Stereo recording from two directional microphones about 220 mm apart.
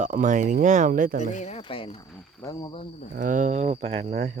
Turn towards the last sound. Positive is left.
turn(degrees=-30)  # may be behind; listen again after turning